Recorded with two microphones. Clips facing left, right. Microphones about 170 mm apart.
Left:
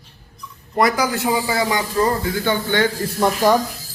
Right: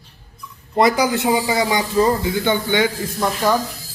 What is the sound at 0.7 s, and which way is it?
A man's voice, 25° right (ahead or behind).